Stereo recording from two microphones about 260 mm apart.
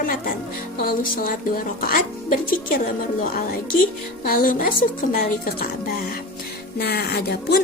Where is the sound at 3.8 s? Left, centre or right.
Left.